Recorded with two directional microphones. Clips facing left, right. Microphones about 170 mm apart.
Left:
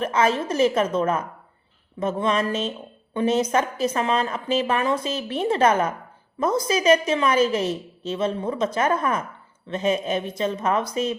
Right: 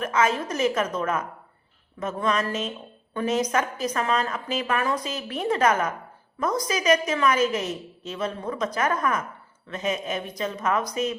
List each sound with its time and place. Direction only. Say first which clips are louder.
0.0 s a woman's voice: left 2 dB; 30° left (ahead or behind)